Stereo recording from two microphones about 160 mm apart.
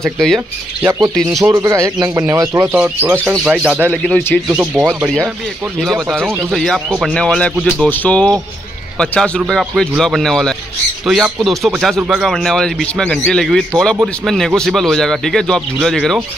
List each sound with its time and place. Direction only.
0.0 s a man's voice: 5° left (ahead or behind)
0.8 s speech: 20° right (ahead or behind)
2.7 s a man's voice: 10° right (ahead or behind)
6.5 s a man's voice: centre (ahead or behind)